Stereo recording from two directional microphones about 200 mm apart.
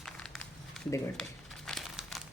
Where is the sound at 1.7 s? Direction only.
Centre (ahead or behind).